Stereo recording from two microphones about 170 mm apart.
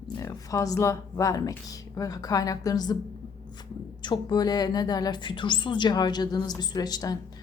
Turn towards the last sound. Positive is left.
turn(degrees=25)  # may be behind; listen again after turning